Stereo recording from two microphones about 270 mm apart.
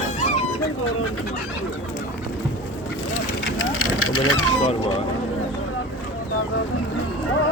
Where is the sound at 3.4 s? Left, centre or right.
Left.